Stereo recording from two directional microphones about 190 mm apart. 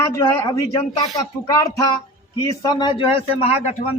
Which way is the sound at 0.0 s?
15° left (ahead or behind).